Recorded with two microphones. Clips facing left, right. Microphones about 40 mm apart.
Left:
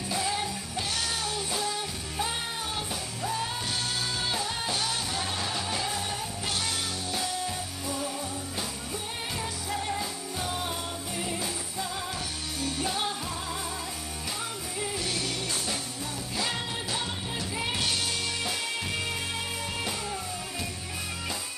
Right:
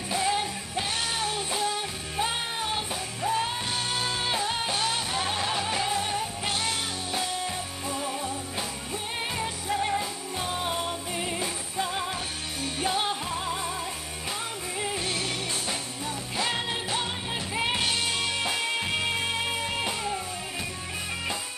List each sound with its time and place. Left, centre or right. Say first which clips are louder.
0.1 s music: right 4 dB; right
9.7 s music: right 5 dB; right
14.8 s music: right 2 dB; right